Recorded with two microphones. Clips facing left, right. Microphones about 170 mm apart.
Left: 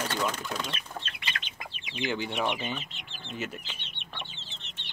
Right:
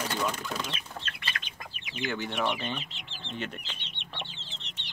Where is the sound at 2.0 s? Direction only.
15° left (ahead or behind).